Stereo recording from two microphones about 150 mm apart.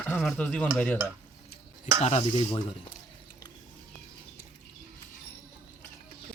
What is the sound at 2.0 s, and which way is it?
Speech, 45° left (ahead or behind).